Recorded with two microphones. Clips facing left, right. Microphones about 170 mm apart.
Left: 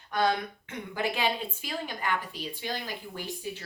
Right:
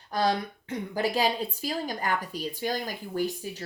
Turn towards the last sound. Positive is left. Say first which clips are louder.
# right 7 dB
turn(degrees=-45)  # may be behind; listen again after turning